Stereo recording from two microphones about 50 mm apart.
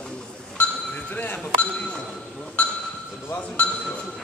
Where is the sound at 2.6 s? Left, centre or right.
Left.